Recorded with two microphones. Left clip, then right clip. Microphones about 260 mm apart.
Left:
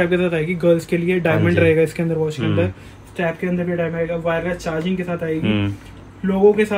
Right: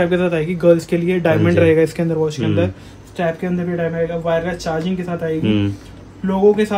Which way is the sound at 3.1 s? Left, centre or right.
Centre.